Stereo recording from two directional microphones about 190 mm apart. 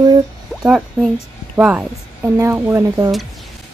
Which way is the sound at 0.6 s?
5° right (ahead or behind).